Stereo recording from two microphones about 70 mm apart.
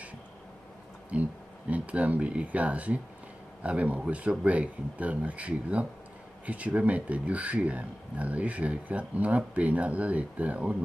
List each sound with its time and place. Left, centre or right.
1.1 s speech: centre